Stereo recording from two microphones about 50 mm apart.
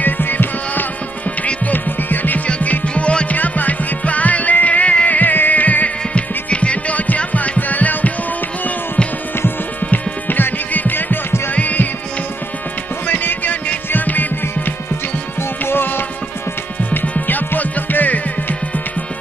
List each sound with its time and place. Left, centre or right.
0.0 s music: left
3.3 s music: left
9.8 s music: left
13.0 s music: left
17.0 s music: left